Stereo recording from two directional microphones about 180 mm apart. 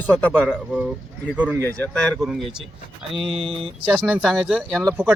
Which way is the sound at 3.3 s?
30° right (ahead or behind).